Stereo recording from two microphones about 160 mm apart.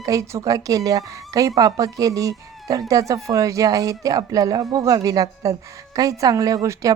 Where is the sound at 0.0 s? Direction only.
20° right (ahead or behind).